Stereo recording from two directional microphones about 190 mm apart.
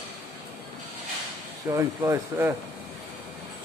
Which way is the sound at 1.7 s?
15° right (ahead or behind).